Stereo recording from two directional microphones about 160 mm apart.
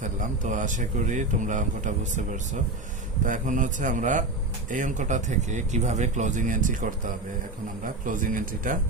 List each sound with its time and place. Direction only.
0.0 s speech: 55° right (ahead or behind)